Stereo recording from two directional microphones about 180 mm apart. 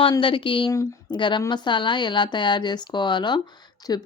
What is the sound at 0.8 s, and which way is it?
Speech, 15° left (ahead or behind).